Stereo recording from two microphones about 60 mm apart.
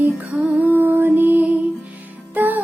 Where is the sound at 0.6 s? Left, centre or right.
Right.